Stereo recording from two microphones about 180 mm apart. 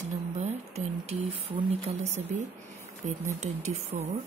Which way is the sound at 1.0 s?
35° right (ahead or behind).